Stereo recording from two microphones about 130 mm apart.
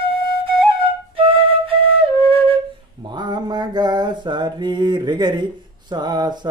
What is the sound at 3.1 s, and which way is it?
Mantra, 35° right (ahead or behind).